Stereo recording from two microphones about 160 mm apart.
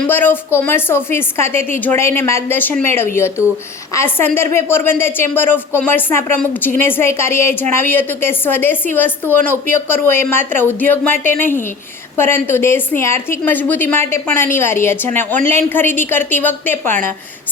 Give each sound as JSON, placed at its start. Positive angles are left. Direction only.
{"t": 0.0, "sound": "a woman's voice", "side_deg": 10}